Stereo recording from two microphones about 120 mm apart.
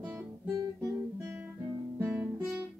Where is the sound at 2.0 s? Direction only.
15° right (ahead or behind).